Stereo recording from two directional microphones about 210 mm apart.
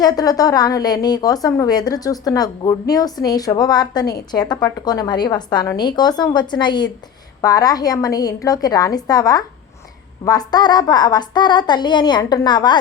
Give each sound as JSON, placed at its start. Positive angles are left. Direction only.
{"t": 0.0, "sound": "a woman's voice", "side_deg": 15}